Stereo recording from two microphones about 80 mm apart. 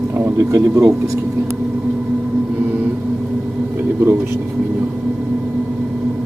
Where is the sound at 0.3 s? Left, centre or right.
Right.